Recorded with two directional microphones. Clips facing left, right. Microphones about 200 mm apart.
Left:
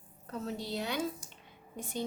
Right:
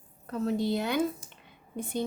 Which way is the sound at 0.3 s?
55° right (ahead or behind).